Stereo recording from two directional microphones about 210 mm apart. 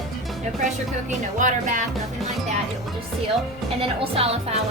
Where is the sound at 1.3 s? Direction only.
35° right (ahead or behind).